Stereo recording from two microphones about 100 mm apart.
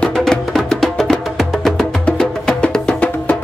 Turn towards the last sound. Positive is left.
turn(degrees=10)  # may be behind; listen again after turning